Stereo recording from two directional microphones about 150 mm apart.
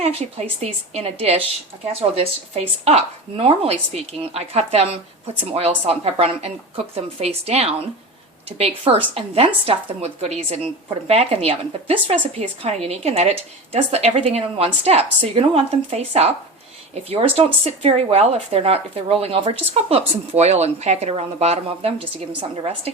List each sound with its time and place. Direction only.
0.0 s a woman's voice: 45° right (ahead or behind)